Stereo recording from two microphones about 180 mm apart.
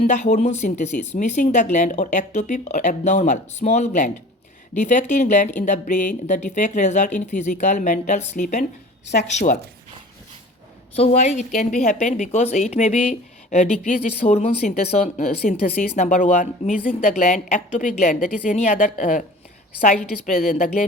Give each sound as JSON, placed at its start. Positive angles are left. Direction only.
{"t": 0.0, "sound": "speech", "side_deg": 40}
{"t": 10.9, "sound": "speech", "side_deg": 35}